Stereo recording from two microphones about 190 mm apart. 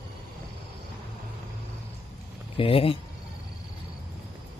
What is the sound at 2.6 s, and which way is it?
Speech, 30° left (ahead or behind).